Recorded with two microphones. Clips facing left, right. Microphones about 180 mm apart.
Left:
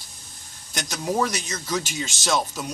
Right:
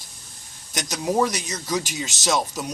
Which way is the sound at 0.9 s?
10° right (ahead or behind).